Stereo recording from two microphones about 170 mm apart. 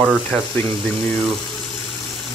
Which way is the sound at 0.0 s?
5° right (ahead or behind).